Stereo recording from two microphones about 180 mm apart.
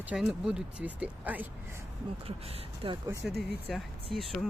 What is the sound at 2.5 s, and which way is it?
Speech, 30° right (ahead or behind).